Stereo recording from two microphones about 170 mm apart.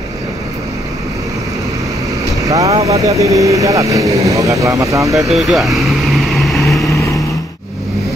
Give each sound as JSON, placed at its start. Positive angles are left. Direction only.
{"t": 2.4, "sound": "vehicle", "side_deg": -20}
{"t": 2.7, "sound": "speech", "side_deg": -40}
{"t": 3.0, "sound": "speech", "side_deg": -20}
{"t": 5.3, "sound": "vehicle", "side_deg": 0}